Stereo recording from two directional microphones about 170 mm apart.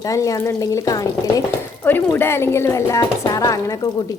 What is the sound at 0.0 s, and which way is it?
A woman's voice, 20° left (ahead or behind).